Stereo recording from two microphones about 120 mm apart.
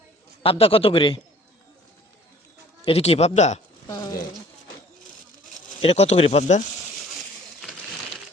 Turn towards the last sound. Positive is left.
turn(degrees=60)  # may be behind; listen again after turning